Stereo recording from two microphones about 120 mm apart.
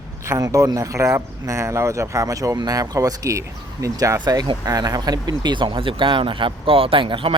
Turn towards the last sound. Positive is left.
turn(degrees=-45)  # may be behind; listen again after turning